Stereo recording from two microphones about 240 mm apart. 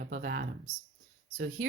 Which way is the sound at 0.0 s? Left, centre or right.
Right.